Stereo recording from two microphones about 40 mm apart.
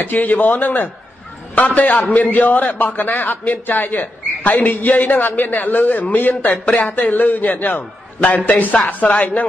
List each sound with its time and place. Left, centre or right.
0.0 s a man's voice: left
6.5 s speech: left
6.8 s a man's voice: left
8.8 s speech: left